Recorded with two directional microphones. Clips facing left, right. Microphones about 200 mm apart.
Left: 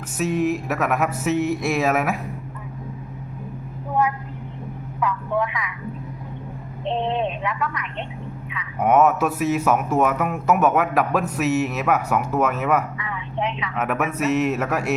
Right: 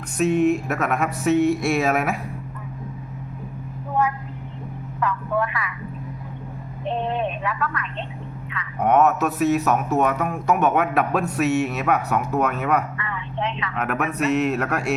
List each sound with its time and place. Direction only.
0.2 s speech: centre (ahead or behind)
4.9 s a woman's voice: 15° left (ahead or behind)
6.8 s a sound: 25° left (ahead or behind)
8.5 s speech: 5° left (ahead or behind)